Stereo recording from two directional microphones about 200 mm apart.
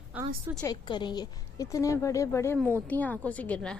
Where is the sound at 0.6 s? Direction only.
20° left (ahead or behind).